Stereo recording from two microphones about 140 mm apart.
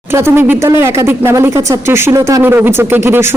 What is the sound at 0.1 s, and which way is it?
Speech, 15° right (ahead or behind).